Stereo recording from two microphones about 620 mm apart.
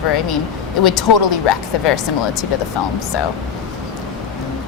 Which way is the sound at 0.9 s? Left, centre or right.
Left.